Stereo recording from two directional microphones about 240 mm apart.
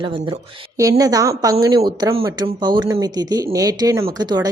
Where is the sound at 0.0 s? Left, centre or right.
Right.